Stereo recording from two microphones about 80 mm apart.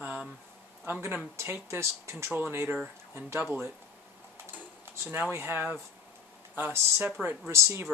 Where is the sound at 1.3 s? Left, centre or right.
Right.